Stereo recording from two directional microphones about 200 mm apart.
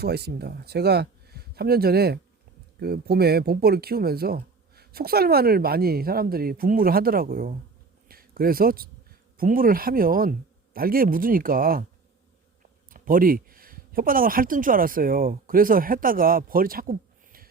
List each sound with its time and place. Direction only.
0.0 s speech: 55° right (ahead or behind)
8.0 s a sound: 50° right (ahead or behind)
9.4 s speech: 45° right (ahead or behind)
12.9 s speech: 45° right (ahead or behind)